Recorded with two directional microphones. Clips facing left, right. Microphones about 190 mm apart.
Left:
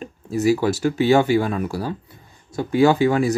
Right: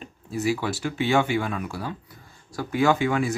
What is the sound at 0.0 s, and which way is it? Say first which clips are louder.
Speech: left 7 dB; 40° left (ahead or behind).